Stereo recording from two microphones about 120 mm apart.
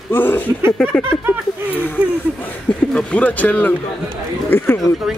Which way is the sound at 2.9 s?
10° left (ahead or behind).